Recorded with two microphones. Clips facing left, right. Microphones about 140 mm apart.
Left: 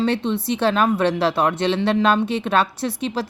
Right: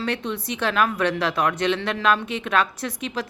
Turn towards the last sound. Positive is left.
turn(degrees=30)  # may be behind; listen again after turning